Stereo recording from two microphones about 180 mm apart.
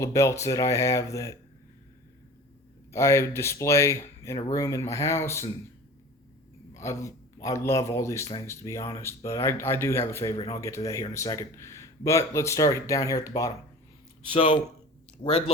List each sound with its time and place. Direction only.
0.0 s a man's voice: 15° left (ahead or behind)
2.9 s a man's voice: 15° left (ahead or behind)
6.7 s a man's voice: 15° left (ahead or behind)
14.3 s speech: 30° left (ahead or behind)